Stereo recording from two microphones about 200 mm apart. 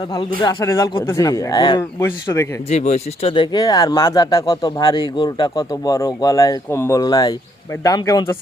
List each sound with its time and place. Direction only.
0.4 s speech: 15° left (ahead or behind)
2.6 s speech: 30° left (ahead or behind); by 8.4 s 15° left (ahead or behind)